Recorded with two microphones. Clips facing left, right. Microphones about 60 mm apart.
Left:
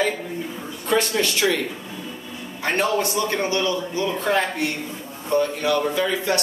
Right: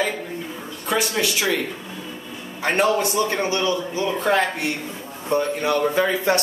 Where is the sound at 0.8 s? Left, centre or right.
Centre.